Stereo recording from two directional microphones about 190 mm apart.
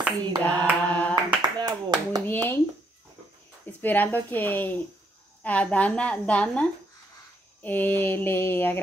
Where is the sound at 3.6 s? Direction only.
10° left (ahead or behind).